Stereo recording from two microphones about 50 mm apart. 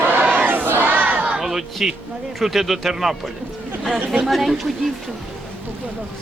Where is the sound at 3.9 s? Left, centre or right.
Right.